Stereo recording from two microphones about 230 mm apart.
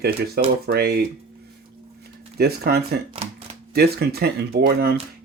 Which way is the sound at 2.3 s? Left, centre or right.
Right.